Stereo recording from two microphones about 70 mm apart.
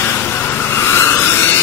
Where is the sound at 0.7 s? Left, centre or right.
Left.